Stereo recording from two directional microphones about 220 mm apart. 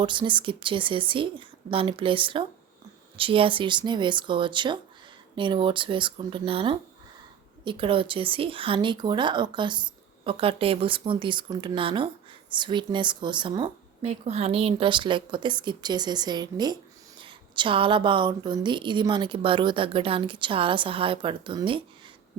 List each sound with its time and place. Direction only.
0.0 s a woman's voice: 20° right (ahead or behind)